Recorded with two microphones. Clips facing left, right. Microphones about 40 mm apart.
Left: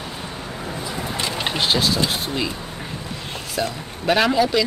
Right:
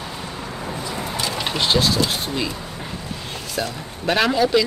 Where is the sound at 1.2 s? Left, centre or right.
Left.